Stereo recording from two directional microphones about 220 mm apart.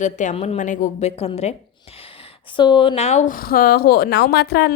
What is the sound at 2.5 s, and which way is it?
A woman's voice, 20° left (ahead or behind).